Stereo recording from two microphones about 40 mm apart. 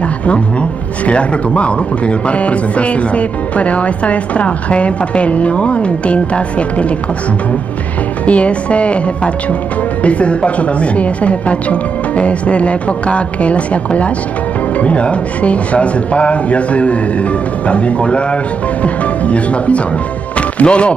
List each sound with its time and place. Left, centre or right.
0.3 s speech: left
8.3 s speech: left
20.3 s music: left